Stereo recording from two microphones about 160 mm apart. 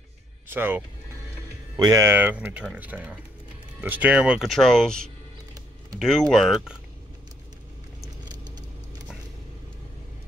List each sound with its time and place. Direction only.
0.5 s speech: 15° right (ahead or behind)
8.3 s vehicle: 25° right (ahead or behind)